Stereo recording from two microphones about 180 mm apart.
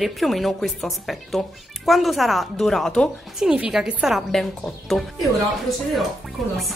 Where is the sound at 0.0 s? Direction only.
Centre (ahead or behind).